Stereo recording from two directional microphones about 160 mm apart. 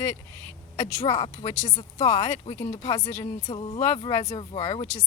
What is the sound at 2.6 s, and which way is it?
Speech, 40° left (ahead or behind).